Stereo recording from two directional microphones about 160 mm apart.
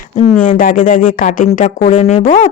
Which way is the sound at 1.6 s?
45° left (ahead or behind).